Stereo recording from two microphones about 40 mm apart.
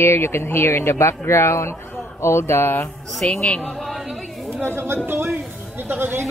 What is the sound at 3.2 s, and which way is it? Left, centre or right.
Speech, centre.